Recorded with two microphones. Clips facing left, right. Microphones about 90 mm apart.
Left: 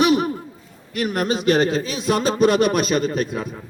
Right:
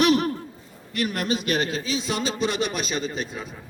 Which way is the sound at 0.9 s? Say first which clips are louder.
Left 4 dB; 20° left (ahead or behind).